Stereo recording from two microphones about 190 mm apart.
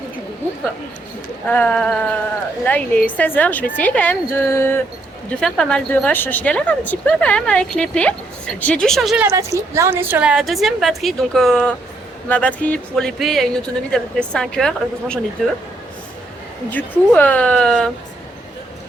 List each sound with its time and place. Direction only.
1.5 s speech: 10° left (ahead or behind)
9.2 s speech: 15° right (ahead or behind); by 15.2 s 5° left (ahead or behind)
16.6 s speech: 10° left (ahead or behind)